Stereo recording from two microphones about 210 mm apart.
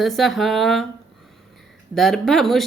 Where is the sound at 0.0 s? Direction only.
Centre (ahead or behind).